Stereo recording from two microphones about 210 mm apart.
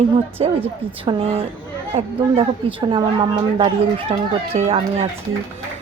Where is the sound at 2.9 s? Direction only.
25° right (ahead or behind).